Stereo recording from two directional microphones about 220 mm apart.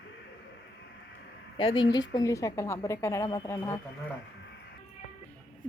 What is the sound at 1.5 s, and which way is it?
A woman's voice, 25° left (ahead or behind).